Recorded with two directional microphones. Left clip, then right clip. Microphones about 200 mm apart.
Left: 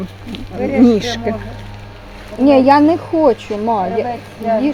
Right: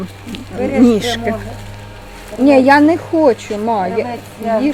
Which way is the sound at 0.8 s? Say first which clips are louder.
Even; 15° left (ahead or behind).